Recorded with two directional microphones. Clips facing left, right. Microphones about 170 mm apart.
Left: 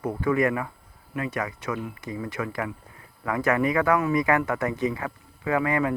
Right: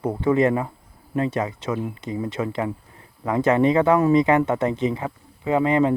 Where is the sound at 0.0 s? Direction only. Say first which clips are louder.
Right 4 dB; 25° right (ahead or behind).